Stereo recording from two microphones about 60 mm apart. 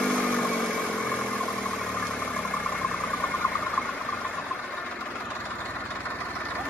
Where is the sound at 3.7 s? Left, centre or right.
Left.